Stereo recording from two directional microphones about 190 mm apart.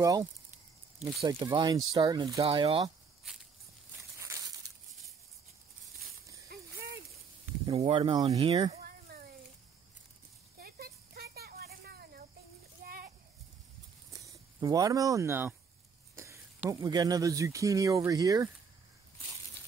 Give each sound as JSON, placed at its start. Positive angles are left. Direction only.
{"t": 0.9, "sound": "speech", "side_deg": -25}
{"t": 4.2, "sound": "crushing", "side_deg": -15}
{"t": 6.5, "sound": "mechanisms", "side_deg": -55}
{"t": 7.6, "sound": "speech", "side_deg": -25}
{"t": 10.6, "sound": "a sound", "side_deg": -55}
{"t": 14.2, "sound": "speech", "side_deg": -20}